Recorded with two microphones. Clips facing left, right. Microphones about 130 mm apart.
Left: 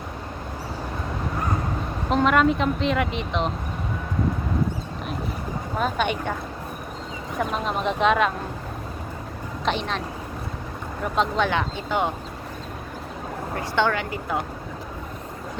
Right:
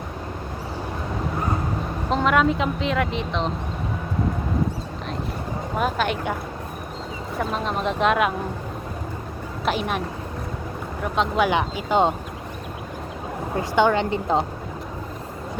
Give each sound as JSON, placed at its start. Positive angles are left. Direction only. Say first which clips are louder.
{"t": 2.0, "sound": "speech", "louder": "left 1 dB", "side_deg": 0}
{"t": 5.7, "sound": "speech", "louder": "right 1 dB", "side_deg": -5}
{"t": 7.3, "sound": "speech", "louder": "even", "side_deg": 0}
{"t": 9.6, "sound": "speech", "louder": "right 2 dB", "side_deg": -10}
{"t": 11.0, "sound": "speech", "louder": "right 1 dB", "side_deg": 0}
{"t": 11.4, "sound": "speech", "louder": "right 3 dB", "side_deg": -15}
{"t": 13.6, "sound": "speech", "louder": "right 4 dB", "side_deg": -15}
{"t": 14.0, "sound": "speech", "louder": "right 6 dB", "side_deg": -25}